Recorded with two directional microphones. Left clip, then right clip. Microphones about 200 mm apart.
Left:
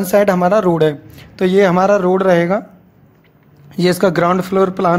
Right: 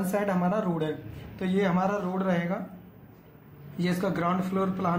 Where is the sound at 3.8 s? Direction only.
60° left (ahead or behind).